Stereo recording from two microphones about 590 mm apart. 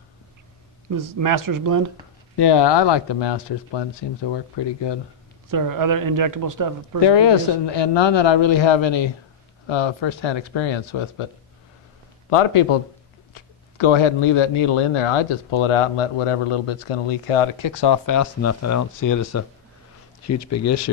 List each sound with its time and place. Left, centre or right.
0.8 s speech: right
2.3 s speech: left
5.5 s speech: right
7.0 s speech: left
12.3 s speech: left